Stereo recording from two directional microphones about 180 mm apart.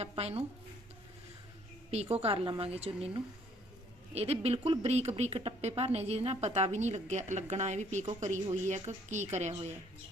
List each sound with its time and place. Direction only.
0.0 s speech: 35° right (ahead or behind)
1.9 s speech: 35° right (ahead or behind)